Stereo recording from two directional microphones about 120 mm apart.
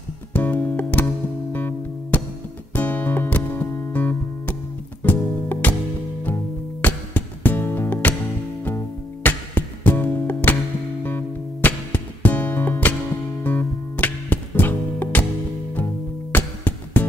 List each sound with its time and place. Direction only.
0.3 s music: 15° left (ahead or behind)
6.8 s music: 15° left (ahead or behind)
9.2 s music: 15° left (ahead or behind)